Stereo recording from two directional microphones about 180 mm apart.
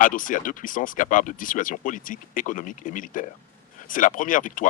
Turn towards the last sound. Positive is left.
turn(degrees=45)  # may be behind; listen again after turning